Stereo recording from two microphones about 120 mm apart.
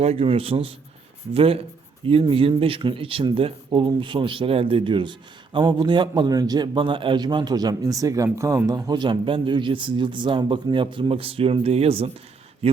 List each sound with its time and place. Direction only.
0.0 s a man's voice: 55° right (ahead or behind)